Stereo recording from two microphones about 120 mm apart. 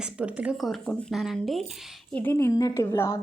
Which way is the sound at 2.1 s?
20° left (ahead or behind).